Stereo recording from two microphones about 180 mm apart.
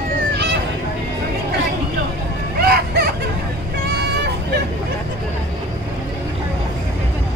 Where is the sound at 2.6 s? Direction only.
60° right (ahead or behind).